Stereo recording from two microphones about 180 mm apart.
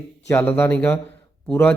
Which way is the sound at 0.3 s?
10° left (ahead or behind).